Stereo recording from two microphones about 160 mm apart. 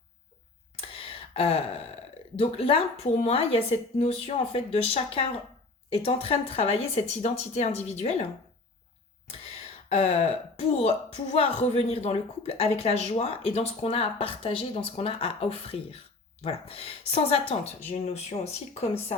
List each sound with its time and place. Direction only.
0.8 s a sound: 35° left (ahead or behind)
2.3 s speech: 35° left (ahead or behind)
9.9 s speech: 40° left (ahead or behind)